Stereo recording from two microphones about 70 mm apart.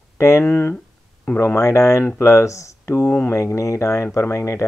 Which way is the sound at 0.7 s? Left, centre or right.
Centre.